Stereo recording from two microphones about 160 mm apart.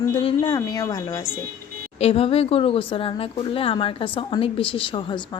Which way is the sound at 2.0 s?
40° left (ahead or behind).